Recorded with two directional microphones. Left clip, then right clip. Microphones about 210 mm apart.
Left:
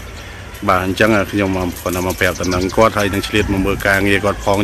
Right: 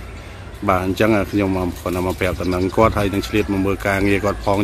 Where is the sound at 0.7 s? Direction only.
5° right (ahead or behind).